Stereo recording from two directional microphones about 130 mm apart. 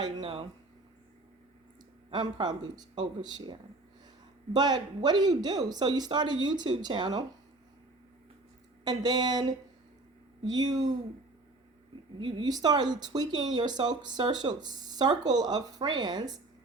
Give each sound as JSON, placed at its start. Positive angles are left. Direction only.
{"t": 0.0, "sound": "speech", "side_deg": -45}
{"t": 2.0, "sound": "speech", "side_deg": -35}
{"t": 8.8, "sound": "speech", "side_deg": -30}
{"t": 12.2, "sound": "speech", "side_deg": -35}